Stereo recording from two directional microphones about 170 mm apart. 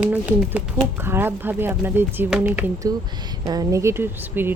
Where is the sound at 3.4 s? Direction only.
20° right (ahead or behind).